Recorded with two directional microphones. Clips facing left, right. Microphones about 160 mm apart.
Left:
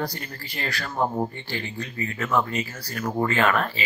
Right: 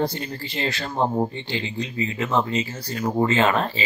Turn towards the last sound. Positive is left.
turn(degrees=-25)  # may be behind; listen again after turning